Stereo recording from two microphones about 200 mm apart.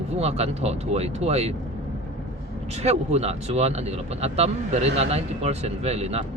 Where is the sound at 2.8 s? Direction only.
30° right (ahead or behind).